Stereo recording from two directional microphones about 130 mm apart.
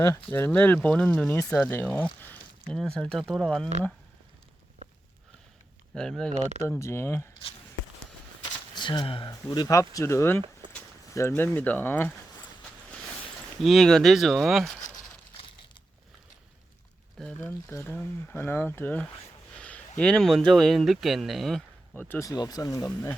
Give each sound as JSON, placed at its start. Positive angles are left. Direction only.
{"t": 0.0, "sound": "speech", "side_deg": 20}
{"t": 5.9, "sound": "speech", "side_deg": 5}
{"t": 6.4, "sound": "speech", "side_deg": -60}
{"t": 6.7, "sound": "speech", "side_deg": 20}
{"t": 8.7, "sound": "speech", "side_deg": 35}
{"t": 9.3, "sound": "speech", "side_deg": 25}
{"t": 10.6, "sound": "a sound", "side_deg": -40}
{"t": 11.1, "sound": "speech", "side_deg": 20}
{"t": 13.6, "sound": "speech", "side_deg": 0}
{"t": 17.4, "sound": "speech", "side_deg": 20}
{"t": 21.9, "sound": "speech", "side_deg": 15}
{"t": 22.3, "sound": "speech", "side_deg": 30}